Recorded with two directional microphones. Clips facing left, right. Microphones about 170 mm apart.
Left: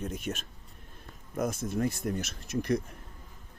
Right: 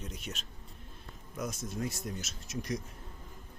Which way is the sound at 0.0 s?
50° left (ahead or behind).